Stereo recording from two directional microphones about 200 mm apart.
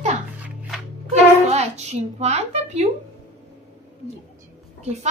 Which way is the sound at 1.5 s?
35° right (ahead or behind).